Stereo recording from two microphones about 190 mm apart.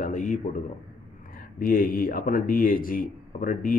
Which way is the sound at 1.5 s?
50° left (ahead or behind).